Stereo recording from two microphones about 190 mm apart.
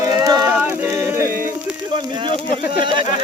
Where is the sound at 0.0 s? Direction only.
20° right (ahead or behind).